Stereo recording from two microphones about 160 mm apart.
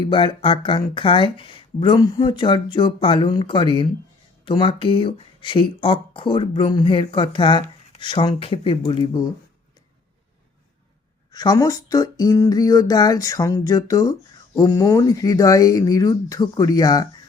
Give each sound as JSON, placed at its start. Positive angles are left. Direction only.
{"t": 0.1, "sound": "speech", "side_deg": 30}
{"t": 11.3, "sound": "speech", "side_deg": 25}